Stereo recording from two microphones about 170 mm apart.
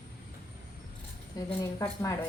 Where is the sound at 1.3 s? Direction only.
20° left (ahead or behind).